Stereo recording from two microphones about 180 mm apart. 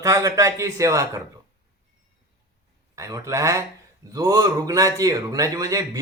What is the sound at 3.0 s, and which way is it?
A man's voice, 20° right (ahead or behind).